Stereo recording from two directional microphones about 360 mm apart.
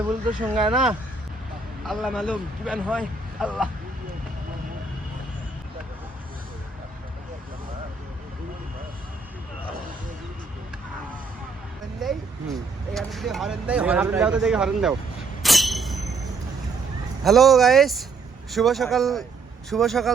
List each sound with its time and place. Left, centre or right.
0.3 s speech: right
0.7 s speech: centre
12.9 s speech: centre
15.4 s a sound: centre
17.2 s speech: centre